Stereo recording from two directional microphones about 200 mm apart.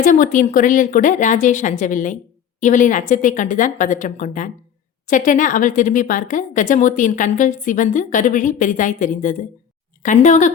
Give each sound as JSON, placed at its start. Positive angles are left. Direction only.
{"t": 0.0, "sound": "speech", "side_deg": 40}